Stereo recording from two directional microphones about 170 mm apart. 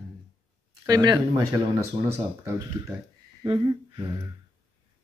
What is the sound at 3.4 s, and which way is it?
Speech, 25° right (ahead or behind).